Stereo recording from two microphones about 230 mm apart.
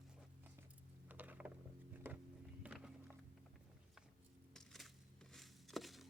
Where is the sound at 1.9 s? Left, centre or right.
Centre.